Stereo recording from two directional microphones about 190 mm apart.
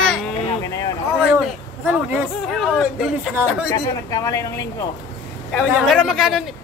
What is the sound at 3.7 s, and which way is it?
Speech, 20° left (ahead or behind).